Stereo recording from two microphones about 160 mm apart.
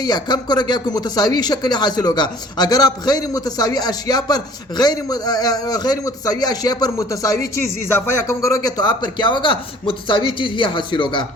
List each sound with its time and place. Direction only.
0.0 s speech: 25° left (ahead or behind)